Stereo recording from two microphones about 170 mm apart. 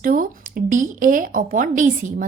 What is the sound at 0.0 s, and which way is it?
A woman's voice, 55° right (ahead or behind).